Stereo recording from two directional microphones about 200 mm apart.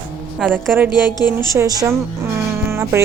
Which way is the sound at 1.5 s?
15° right (ahead or behind).